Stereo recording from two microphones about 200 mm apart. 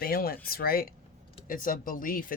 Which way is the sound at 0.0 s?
50° left (ahead or behind).